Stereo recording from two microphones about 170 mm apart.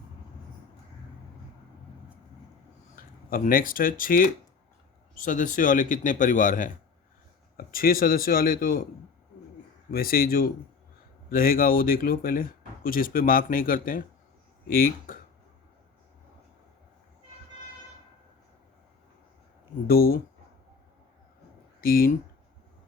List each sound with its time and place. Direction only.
2.9 s speech: 55° left (ahead or behind)
9.9 s speech: 60° left (ahead or behind)
19.9 s speech: 60° left (ahead or behind)
21.8 s speech: 60° left (ahead or behind)